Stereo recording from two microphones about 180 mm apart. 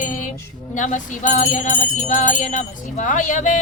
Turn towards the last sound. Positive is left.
turn(degrees=45)  # may be behind; listen again after turning